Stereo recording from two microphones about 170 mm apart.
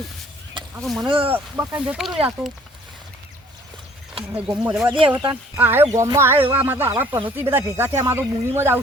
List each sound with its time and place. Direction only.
0.8 s speech: centre (ahead or behind)
1.0 s speech: 30° right (ahead or behind)
1.3 s speech: 10° right (ahead or behind)
4.3 s speech: 10° right (ahead or behind)
4.9 s speech: 30° right (ahead or behind)
5.3 s speech: 10° right (ahead or behind)